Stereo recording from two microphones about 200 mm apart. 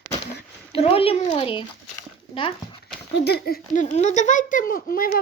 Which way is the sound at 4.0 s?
35° left (ahead or behind).